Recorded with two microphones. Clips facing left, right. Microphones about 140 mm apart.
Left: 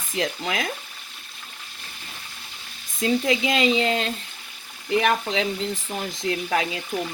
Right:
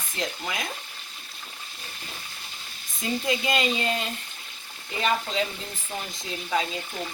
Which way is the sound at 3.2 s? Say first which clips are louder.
Even; 90° left.